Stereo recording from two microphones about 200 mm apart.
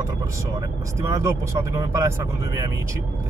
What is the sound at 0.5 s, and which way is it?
Speech, 15° right (ahead or behind).